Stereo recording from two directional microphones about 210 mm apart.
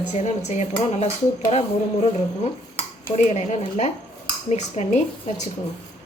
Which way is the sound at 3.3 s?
30° left (ahead or behind).